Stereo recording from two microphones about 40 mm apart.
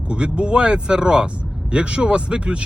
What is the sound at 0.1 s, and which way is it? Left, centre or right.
Speech, right.